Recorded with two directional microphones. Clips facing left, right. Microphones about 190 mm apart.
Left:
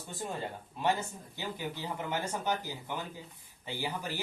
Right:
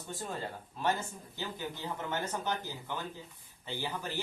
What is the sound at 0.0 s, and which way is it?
Speech, 20° left (ahead or behind).